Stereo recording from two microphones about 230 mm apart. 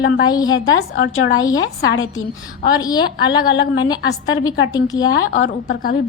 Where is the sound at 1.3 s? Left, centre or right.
Centre.